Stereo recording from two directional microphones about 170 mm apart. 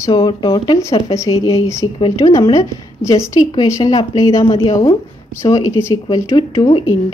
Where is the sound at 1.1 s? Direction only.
20° left (ahead or behind).